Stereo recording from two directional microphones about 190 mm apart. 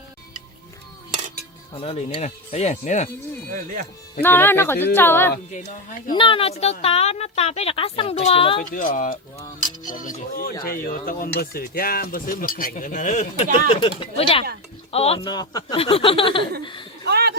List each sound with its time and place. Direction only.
1.7 s speech: 30° left (ahead or behind)
4.2 s speech: 10° left (ahead or behind)
5.5 s speech: 40° left (ahead or behind)
6.1 s speech: 30° left (ahead or behind)
8.6 s speech: 45° left (ahead or behind); by 16.5 s 25° left (ahead or behind)
17.1 s a sound: 60° right (ahead or behind)